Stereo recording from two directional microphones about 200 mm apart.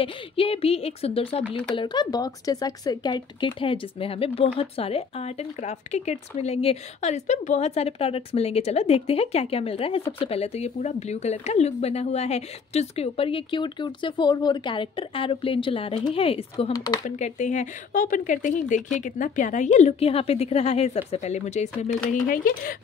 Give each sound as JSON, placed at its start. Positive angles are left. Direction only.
{"t": 0.0, "sound": "speech", "side_deg": 30}
{"t": 17.0, "sound": "a woman's voice", "side_deg": 35}